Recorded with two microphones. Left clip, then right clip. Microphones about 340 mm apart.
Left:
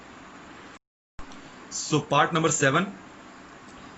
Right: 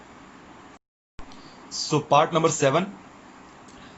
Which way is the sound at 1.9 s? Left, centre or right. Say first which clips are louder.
Right 3 dB; centre.